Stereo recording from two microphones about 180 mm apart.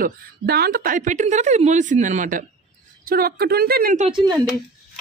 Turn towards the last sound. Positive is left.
turn(degrees=-25)  # may be behind; listen again after turning